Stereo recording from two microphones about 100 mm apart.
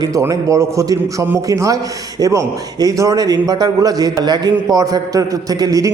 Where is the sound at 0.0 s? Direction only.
30° right (ahead or behind).